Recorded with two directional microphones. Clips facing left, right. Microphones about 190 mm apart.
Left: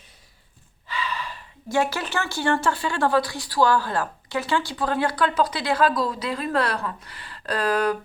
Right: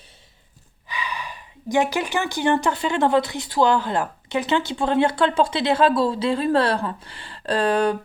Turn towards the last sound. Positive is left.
turn(degrees=-30)  # may be behind; listen again after turning